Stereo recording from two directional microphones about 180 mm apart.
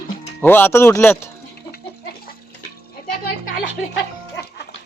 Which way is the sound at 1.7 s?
65° left (ahead or behind).